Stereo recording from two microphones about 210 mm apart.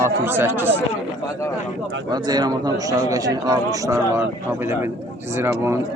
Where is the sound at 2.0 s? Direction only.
20° right (ahead or behind).